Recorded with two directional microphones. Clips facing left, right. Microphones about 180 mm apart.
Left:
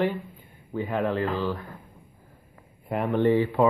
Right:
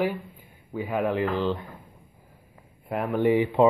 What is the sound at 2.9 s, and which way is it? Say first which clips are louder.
Speech: left 1 dB; 5° right (ahead or behind).